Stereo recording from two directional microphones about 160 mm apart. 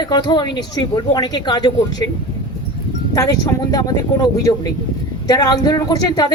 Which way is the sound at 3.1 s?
25° left (ahead or behind).